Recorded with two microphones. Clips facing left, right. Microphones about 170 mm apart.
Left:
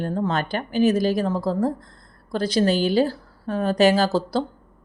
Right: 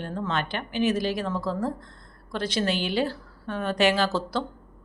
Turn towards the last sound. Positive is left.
turn(degrees=35)  # may be behind; listen again after turning